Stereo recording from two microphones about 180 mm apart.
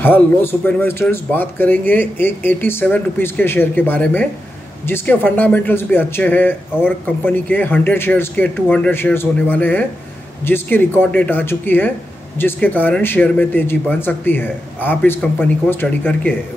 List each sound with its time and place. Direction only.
0.0 s speech: 10° left (ahead or behind)